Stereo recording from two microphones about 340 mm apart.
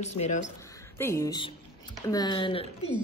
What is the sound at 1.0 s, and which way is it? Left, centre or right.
A woman's voice, centre.